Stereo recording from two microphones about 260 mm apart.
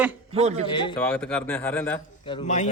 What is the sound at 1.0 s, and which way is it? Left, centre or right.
Speech, centre.